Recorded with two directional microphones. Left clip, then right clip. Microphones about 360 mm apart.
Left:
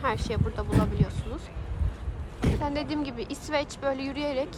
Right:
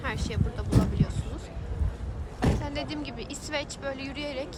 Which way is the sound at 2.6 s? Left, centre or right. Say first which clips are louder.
Left 4 dB; centre.